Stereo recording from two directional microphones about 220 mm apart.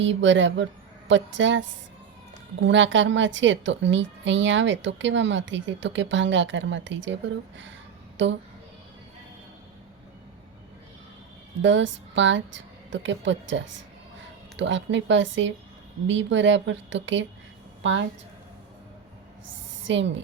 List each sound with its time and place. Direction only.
0.0 s a woman's voice: 55° right (ahead or behind)
8.2 s a woman's voice: 55° right (ahead or behind)
11.6 s a woman's voice: 55° right (ahead or behind)
14.6 s a woman's voice: 55° right (ahead or behind)
19.9 s a woman's voice: 55° right (ahead or behind)